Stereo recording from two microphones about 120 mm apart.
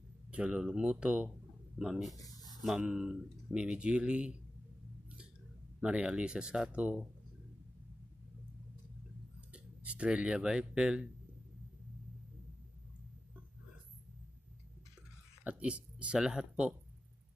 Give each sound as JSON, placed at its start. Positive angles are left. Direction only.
{"t": 0.3, "sound": "speech", "side_deg": -10}
{"t": 2.1, "sound": "speech", "side_deg": 30}
{"t": 2.8, "sound": "speech", "side_deg": -5}
{"t": 5.8, "sound": "speech", "side_deg": -10}
{"t": 9.5, "sound": "speech", "side_deg": -10}
{"t": 15.4, "sound": "speech", "side_deg": -10}